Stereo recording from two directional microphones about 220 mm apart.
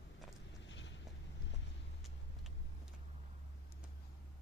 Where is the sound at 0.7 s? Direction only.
55° left (ahead or behind).